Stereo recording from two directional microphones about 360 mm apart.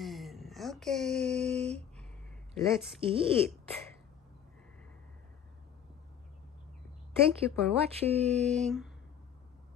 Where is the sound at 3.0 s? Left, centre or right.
Centre.